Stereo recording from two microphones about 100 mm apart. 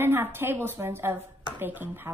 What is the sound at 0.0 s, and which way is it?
A woman's voice, 20° right (ahead or behind).